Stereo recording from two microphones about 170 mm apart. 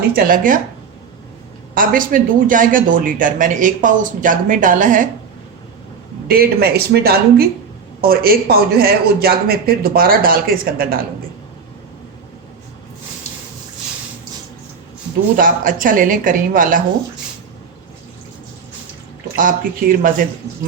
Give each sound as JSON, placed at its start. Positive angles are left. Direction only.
{"t": 0.2, "sound": "speech", "side_deg": -55}
{"t": 1.7, "sound": "speech", "side_deg": -55}
{"t": 6.2, "sound": "speech", "side_deg": -60}
{"t": 15.4, "sound": "speech", "side_deg": -55}
{"t": 19.4, "sound": "speech", "side_deg": -50}